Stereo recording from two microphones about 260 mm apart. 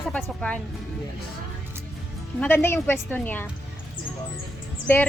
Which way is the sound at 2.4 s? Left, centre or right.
Centre.